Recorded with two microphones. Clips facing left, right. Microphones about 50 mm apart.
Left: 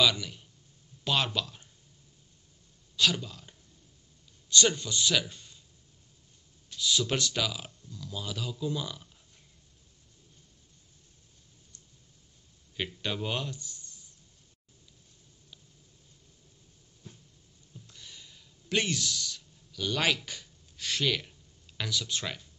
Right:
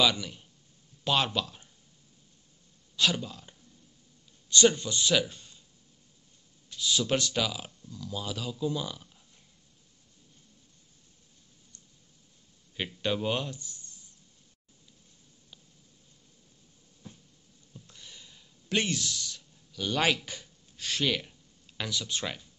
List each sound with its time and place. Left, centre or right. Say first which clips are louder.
0.0 s speech: even; centre
3.0 s speech: even; centre
4.5 s a man's voice: right 3 dB; right
6.7 s speech: right 1 dB; right
13.0 s speech: right 5 dB; centre
13.5 s a sound: even; right
17.8 s a sound: left 1 dB; centre
18.9 s speech: even; right